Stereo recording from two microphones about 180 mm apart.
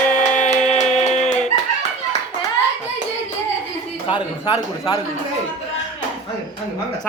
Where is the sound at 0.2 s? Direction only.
40° left (ahead or behind).